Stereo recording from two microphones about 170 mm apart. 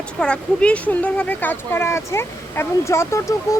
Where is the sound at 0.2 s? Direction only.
5° left (ahead or behind).